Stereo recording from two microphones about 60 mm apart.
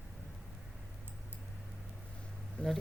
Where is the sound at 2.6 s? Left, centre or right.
Centre.